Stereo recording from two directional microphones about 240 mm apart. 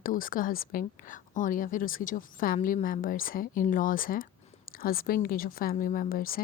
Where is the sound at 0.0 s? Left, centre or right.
Left.